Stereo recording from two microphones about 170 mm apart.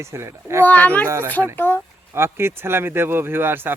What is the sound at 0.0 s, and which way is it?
Speech, 15° right (ahead or behind).